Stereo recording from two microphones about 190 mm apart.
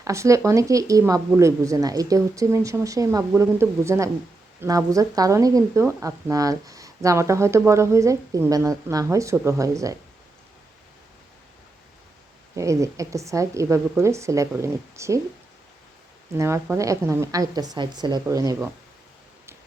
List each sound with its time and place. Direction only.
0.0 s speech: 15° right (ahead or behind)
12.5 s speech: 15° right (ahead or behind)
16.4 s speech: 15° right (ahead or behind)